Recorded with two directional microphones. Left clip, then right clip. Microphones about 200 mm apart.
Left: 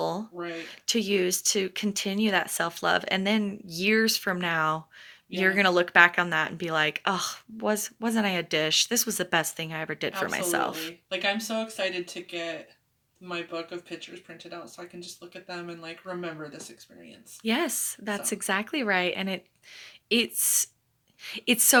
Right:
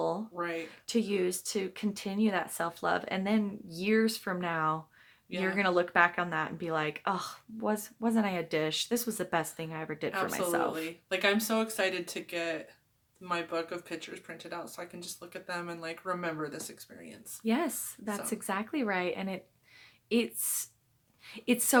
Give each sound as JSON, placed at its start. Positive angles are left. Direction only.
{"t": 0.3, "sound": "a sound", "side_deg": -20}
{"t": 0.6, "sound": "speech", "side_deg": 25}
{"t": 11.1, "sound": "speech", "side_deg": -20}
{"t": 17.4, "sound": "speech", "side_deg": 25}